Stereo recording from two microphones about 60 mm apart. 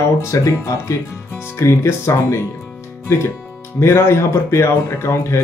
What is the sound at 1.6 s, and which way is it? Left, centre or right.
Speech, left.